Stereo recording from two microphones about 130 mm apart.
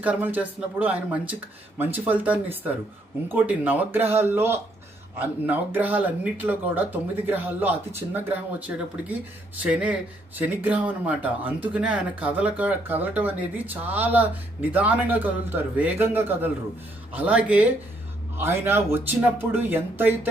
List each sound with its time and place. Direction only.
0.0 s speech: 10° right (ahead or behind)